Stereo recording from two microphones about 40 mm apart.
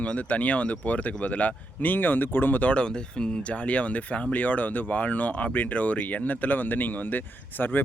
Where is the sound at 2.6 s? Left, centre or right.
Left.